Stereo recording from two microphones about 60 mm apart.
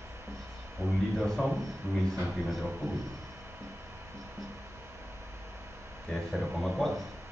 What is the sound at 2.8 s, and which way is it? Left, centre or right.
Speech, right.